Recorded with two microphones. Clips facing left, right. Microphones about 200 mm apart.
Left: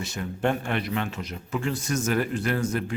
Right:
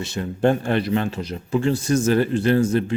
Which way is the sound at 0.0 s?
30° right (ahead or behind).